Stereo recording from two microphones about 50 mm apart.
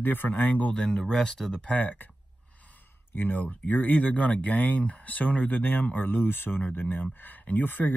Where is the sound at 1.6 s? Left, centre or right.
Left.